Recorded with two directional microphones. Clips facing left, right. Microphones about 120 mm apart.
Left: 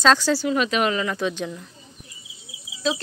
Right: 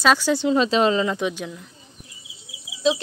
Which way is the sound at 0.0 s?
10° right (ahead or behind).